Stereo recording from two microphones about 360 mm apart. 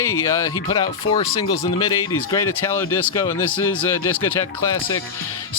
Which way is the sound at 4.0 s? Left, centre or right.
Left.